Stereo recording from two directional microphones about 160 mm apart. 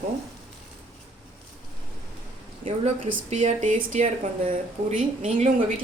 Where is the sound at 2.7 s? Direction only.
45° right (ahead or behind).